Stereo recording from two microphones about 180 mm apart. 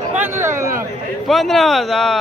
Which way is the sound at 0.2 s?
15° right (ahead or behind).